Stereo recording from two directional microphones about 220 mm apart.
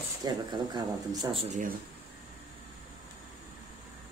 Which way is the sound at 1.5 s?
35° right (ahead or behind).